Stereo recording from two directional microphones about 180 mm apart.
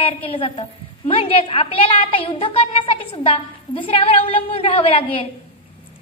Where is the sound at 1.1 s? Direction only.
30° left (ahead or behind).